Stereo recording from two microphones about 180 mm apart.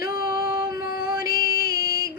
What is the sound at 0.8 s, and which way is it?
Music, 55° left (ahead or behind).